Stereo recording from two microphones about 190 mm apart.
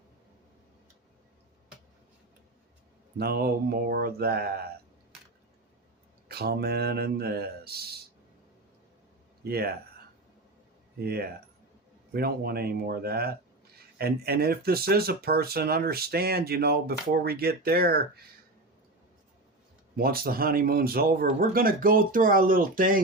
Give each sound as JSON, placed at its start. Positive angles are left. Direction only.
{"t": 3.2, "sound": "speech", "side_deg": -55}
{"t": 6.2, "sound": "speech", "side_deg": -55}
{"t": 9.4, "sound": "speech", "side_deg": -55}
{"t": 11.0, "sound": "speech", "side_deg": -55}
{"t": 20.0, "sound": "speech", "side_deg": -50}